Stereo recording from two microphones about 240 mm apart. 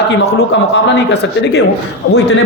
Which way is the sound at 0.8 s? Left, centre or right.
Left.